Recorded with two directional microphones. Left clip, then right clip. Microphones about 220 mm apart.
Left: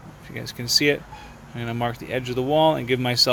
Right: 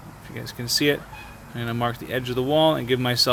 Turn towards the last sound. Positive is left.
turn(degrees=5)  # may be behind; listen again after turning